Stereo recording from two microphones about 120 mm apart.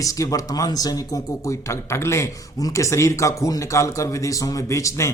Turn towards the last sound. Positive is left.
turn(degrees=25)  # may be behind; listen again after turning